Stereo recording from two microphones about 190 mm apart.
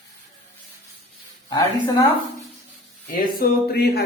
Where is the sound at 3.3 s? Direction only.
55° left (ahead or behind).